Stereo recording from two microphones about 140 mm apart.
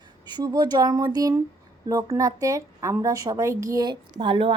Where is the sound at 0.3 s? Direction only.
30° right (ahead or behind).